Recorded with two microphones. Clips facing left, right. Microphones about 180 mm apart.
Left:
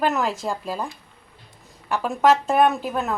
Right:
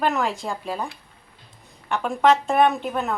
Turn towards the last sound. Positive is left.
turn(degrees=5)  # may be behind; listen again after turning